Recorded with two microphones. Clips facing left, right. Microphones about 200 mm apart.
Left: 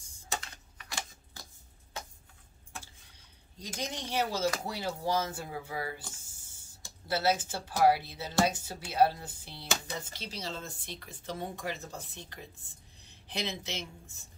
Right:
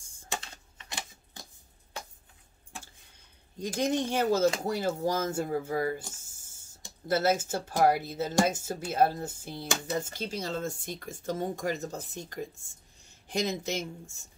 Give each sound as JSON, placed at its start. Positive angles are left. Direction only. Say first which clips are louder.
{"t": 0.3, "sound": "typing", "louder": "right 1 dB", "side_deg": -25}
{"t": 3.5, "sound": "speech", "louder": "right 11 dB", "side_deg": -55}
{"t": 6.2, "sound": "a sound", "louder": "left 1 dB", "side_deg": -45}
{"t": 7.1, "sound": "speech", "louder": "right 4 dB", "side_deg": -50}